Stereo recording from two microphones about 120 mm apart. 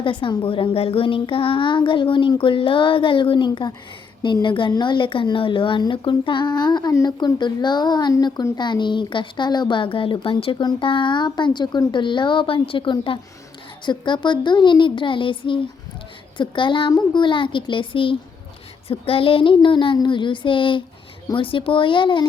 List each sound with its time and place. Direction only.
0.0 s a child's voice: 45° left (ahead or behind)